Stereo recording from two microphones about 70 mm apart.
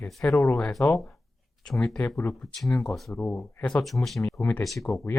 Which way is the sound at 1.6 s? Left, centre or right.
Centre.